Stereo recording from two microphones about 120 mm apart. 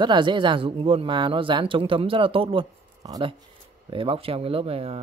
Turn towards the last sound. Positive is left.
turn(degrees=-55)  # may be behind; listen again after turning